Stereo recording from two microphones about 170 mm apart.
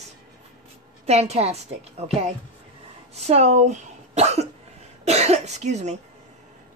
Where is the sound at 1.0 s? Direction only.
40° right (ahead or behind).